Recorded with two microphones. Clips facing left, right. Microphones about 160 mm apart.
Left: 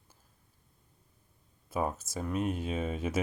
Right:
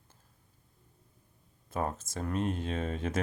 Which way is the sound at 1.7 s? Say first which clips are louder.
Left 1 dB; 10° left (ahead or behind).